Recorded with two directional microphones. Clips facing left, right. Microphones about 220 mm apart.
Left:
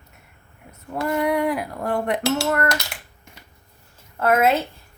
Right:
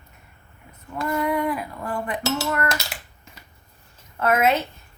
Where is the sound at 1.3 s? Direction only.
70° left (ahead or behind).